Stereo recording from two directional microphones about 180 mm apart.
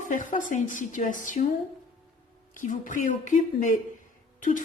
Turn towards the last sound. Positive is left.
turn(degrees=45)  # may be behind; listen again after turning